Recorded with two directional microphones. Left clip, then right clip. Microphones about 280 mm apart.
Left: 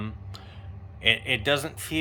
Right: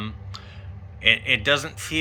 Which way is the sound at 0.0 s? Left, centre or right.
Centre.